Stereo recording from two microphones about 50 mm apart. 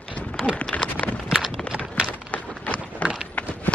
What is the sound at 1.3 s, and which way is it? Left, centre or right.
Clip-clop, centre.